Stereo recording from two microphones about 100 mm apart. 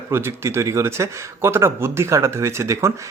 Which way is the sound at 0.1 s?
25° right (ahead or behind).